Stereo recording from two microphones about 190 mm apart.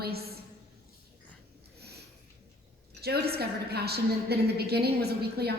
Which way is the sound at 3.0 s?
55° right (ahead or behind).